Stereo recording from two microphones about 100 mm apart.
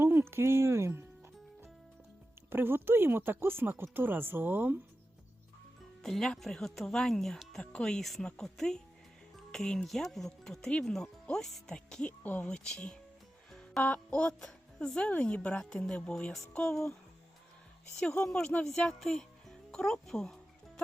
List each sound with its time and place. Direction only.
0.0 s speech: 20° right (ahead or behind)
2.5 s speech: 20° right (ahead or behind)
6.0 s speech: 5° left (ahead or behind)
18.1 s speech: 10° left (ahead or behind)